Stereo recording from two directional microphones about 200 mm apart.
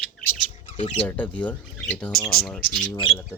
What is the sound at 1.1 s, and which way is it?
Speech, 5° left (ahead or behind).